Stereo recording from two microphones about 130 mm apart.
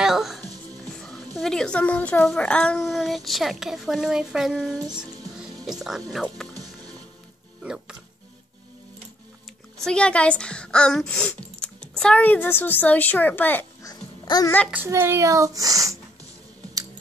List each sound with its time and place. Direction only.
0.0 s music: centre (ahead or behind)
0.8 s a woman's voice: 5° left (ahead or behind)
7.6 s speech: 5° right (ahead or behind)
9.8 s speech: 5° left (ahead or behind)
13.8 s babbling: 30° left (ahead or behind)
14.7 s a child's voice: 15° right (ahead or behind)